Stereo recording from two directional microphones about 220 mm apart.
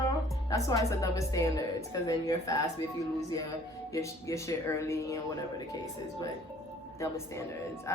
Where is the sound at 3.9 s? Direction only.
15° left (ahead or behind).